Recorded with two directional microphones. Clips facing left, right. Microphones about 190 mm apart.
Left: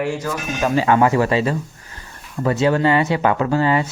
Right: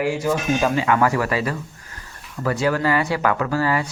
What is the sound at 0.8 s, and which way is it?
Speech, 25° left (ahead or behind).